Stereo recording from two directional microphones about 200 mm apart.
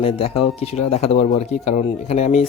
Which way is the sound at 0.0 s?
30° left (ahead or behind).